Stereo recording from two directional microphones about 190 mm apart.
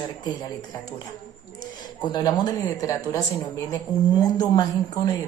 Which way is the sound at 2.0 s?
20° left (ahead or behind).